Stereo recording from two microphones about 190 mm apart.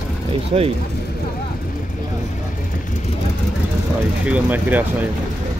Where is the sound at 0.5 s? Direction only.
35° right (ahead or behind).